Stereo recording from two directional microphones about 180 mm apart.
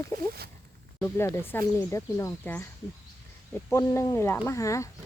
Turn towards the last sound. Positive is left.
turn(degrees=15)  # may be behind; listen again after turning